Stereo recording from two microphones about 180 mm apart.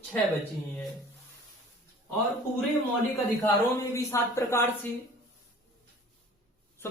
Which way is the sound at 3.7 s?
15° left (ahead or behind).